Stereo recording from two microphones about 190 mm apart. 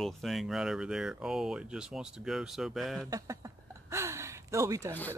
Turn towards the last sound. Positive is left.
turn(degrees=-15)  # may be behind; listen again after turning